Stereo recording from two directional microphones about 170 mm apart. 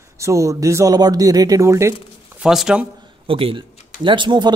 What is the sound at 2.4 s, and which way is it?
Speech, 5° right (ahead or behind).